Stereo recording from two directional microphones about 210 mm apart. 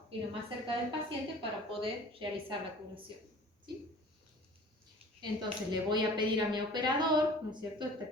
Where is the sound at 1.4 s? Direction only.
25° right (ahead or behind).